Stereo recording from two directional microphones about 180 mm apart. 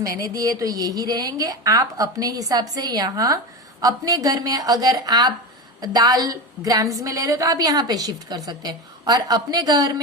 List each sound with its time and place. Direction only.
0.2 s a woman's voice: 20° right (ahead or behind)